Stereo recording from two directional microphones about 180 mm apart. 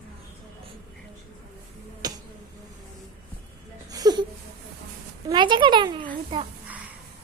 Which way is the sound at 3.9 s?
20° right (ahead or behind).